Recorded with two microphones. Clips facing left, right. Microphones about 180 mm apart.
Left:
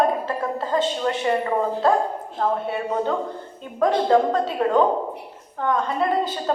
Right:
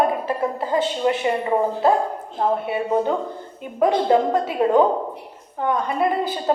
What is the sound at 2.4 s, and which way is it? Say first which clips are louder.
A woman's voice: right 2 dB; 10° right (ahead or behind).